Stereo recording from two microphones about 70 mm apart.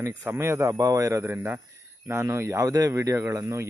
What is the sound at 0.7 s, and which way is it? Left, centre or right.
Speech, right.